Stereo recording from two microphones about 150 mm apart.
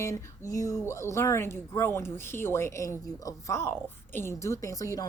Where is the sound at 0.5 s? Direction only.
20° left (ahead or behind).